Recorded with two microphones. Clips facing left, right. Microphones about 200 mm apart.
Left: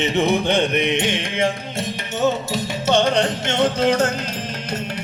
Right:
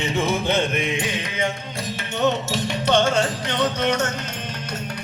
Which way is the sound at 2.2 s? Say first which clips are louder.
Left 1 dB; centre (ahead or behind).